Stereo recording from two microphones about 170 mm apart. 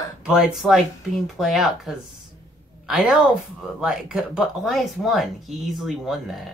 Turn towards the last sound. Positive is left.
turn(degrees=0)  # may be behind; listen again after turning